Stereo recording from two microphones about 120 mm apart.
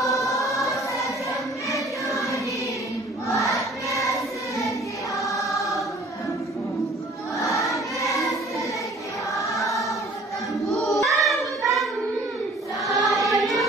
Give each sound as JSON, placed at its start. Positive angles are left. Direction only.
{"t": 1.7, "sound": "choir", "side_deg": 25}
{"t": 7.4, "sound": "choir", "side_deg": 25}
{"t": 10.7, "sound": "child singing", "side_deg": 0}
{"t": 12.9, "sound": "choir", "side_deg": 0}